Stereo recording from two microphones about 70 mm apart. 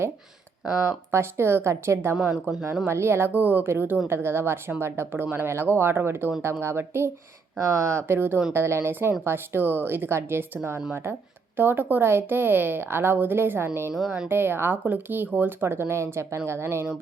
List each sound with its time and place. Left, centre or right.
0.9 s speech: right
2.1 s speech: centre
2.8 s speech: right
7.6 s speech: right